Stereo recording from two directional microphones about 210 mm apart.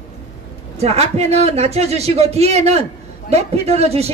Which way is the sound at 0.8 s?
30° right (ahead or behind).